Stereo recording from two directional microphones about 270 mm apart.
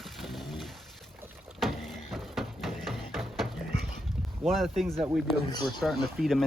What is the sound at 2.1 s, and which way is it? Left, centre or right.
Music, centre.